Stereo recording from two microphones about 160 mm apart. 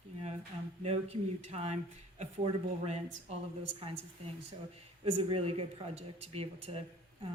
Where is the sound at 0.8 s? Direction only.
40° right (ahead or behind).